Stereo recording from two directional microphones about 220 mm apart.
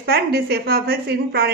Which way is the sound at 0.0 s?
45° right (ahead or behind).